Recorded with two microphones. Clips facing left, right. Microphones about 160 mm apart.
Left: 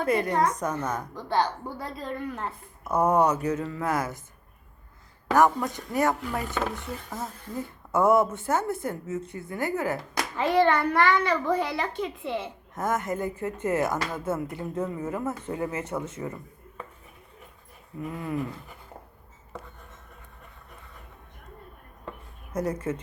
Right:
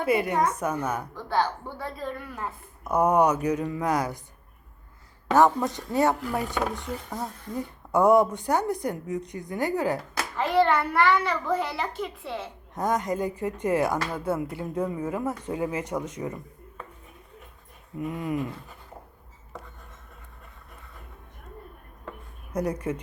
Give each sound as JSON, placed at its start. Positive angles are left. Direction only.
{"t": 0.0, "sound": "a woman's voice", "side_deg": -10}
{"t": 5.3, "sound": "a woman's voice", "side_deg": -20}
{"t": 10.3, "sound": "a child's voice", "side_deg": 0}
{"t": 12.7, "sound": "a woman's voice", "side_deg": -15}
{"t": 18.0, "sound": "speech", "side_deg": -20}
{"t": 22.5, "sound": "a woman's voice", "side_deg": -10}